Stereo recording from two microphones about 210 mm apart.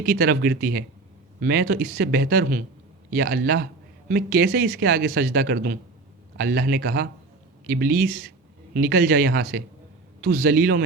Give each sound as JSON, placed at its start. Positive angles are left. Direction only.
{"t": 0.0, "sound": "speech", "side_deg": -45}